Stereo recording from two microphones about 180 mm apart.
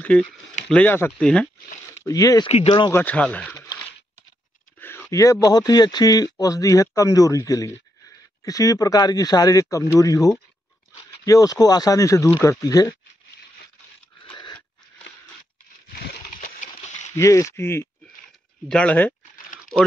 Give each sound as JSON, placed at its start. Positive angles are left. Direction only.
{"t": 0.0, "sound": "speech", "side_deg": 5}
{"t": 2.0, "sound": "speech", "side_deg": 20}
{"t": 2.5, "sound": "speech", "side_deg": 30}
{"t": 2.9, "sound": "speech", "side_deg": 10}
{"t": 4.7, "sound": "speech", "side_deg": 10}
{"t": 14.2, "sound": "crunch", "side_deg": 25}
{"t": 16.3, "sound": "a sound", "side_deg": 45}
{"t": 17.1, "sound": "speech", "side_deg": 15}